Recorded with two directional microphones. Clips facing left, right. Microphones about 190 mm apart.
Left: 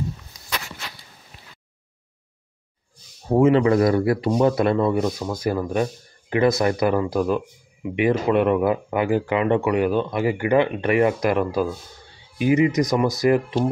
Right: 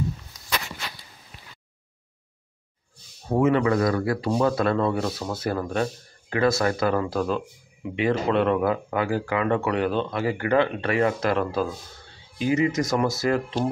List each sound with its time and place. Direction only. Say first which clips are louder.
3.3 s speech: left 4 dB; 30° left (ahead or behind)